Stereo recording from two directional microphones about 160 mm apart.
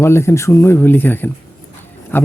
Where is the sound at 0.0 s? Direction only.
15° left (ahead or behind).